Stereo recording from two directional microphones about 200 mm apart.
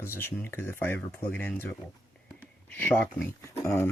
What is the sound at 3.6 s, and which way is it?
Speech, 15° left (ahead or behind).